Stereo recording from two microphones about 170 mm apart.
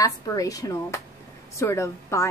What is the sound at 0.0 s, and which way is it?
A woman's voice, 20° left (ahead or behind).